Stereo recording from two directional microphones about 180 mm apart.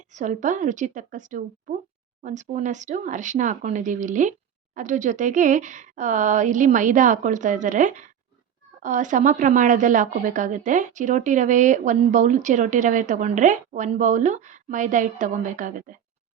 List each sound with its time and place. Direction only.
0.0 s a woman's voice: 40° right (ahead or behind)